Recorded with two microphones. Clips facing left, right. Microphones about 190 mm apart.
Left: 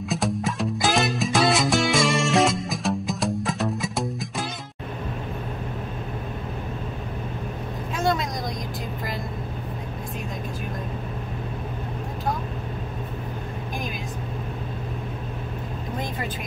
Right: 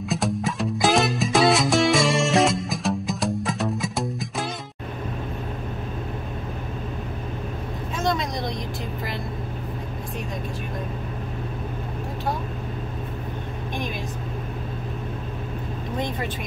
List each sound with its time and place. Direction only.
0.1 s music: centre (ahead or behind)
8.0 s vehicle: 5° left (ahead or behind)